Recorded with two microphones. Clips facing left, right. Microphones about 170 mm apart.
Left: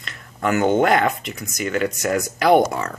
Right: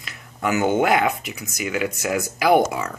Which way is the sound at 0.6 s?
5° right (ahead or behind).